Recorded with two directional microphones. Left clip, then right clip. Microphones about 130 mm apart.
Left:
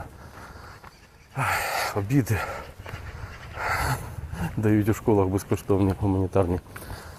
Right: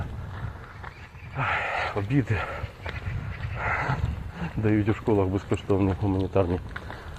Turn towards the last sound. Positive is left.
turn(degrees=35)  # may be behind; listen again after turning